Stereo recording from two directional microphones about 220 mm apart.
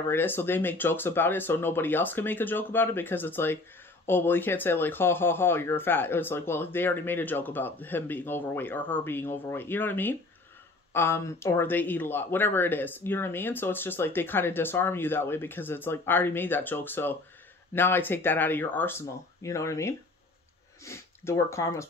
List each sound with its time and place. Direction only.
0.1 s speech: 10° left (ahead or behind)